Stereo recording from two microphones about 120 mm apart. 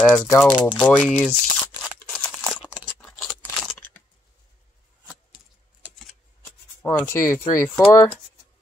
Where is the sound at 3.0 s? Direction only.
Centre (ahead or behind).